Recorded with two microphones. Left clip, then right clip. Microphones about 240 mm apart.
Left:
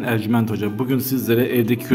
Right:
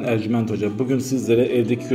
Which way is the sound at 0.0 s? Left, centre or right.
Left.